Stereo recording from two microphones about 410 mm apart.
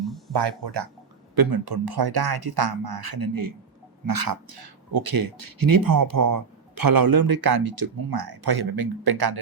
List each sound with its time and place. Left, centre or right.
0.3 s speech: right
1.4 s speech: right